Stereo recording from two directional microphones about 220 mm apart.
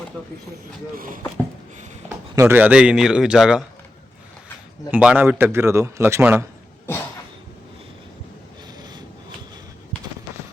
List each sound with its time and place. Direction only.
0.9 s speech: 40° right (ahead or behind)
2.3 s a man's voice: 10° right (ahead or behind)
4.9 s a man's voice: 5° right (ahead or behind)
8.8 s a sound: 20° right (ahead or behind)